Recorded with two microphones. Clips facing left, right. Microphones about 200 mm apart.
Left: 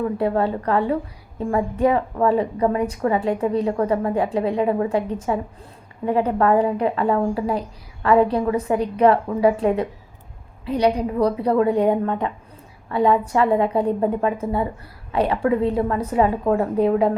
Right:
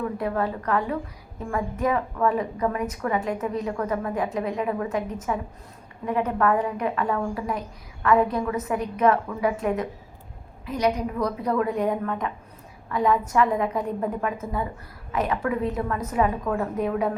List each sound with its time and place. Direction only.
0.2 s a woman's voice: 30° left (ahead or behind)